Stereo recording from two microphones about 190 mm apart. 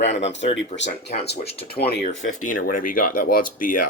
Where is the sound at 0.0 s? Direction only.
35° left (ahead or behind).